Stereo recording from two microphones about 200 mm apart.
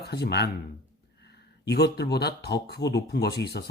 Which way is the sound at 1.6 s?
55° left (ahead or behind).